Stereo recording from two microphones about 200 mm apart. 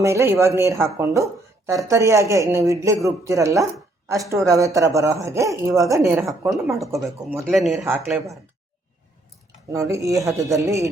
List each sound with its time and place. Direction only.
0.0 s speech: 15° right (ahead or behind)
7.0 s speech: 15° right (ahead or behind)
7.4 s speech: centre (ahead or behind)
7.9 s speech: 10° right (ahead or behind)
9.7 s speech: 15° right (ahead or behind)